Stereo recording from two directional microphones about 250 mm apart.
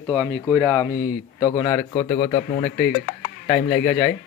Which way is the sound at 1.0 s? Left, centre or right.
Centre.